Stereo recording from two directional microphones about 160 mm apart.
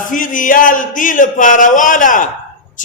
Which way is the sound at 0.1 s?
55° left (ahead or behind).